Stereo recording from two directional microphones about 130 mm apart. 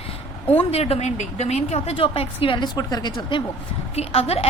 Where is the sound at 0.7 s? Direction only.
50° left (ahead or behind).